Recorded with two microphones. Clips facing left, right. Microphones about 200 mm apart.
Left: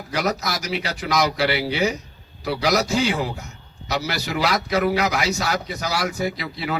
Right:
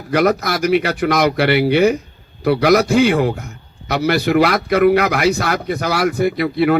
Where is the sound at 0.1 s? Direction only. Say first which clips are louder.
Right 9 dB; 55° right (ahead or behind).